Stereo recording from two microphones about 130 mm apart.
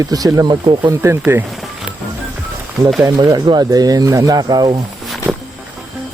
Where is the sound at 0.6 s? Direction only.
40° right (ahead or behind).